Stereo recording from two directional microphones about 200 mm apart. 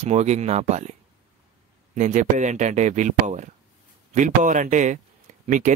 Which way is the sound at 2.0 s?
35° right (ahead or behind).